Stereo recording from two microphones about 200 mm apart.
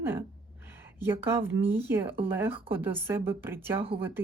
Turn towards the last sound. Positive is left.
turn(degrees=-10)  # may be behind; listen again after turning